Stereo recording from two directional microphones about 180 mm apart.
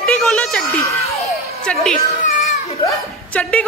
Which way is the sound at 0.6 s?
15° left (ahead or behind).